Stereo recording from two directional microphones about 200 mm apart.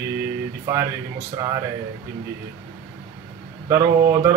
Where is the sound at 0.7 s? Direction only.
15° right (ahead or behind).